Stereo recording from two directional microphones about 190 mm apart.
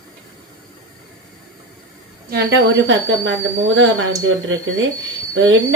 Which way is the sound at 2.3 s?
70° right (ahead or behind).